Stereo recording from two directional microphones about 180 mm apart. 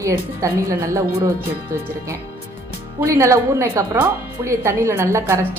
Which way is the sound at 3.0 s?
15° right (ahead or behind).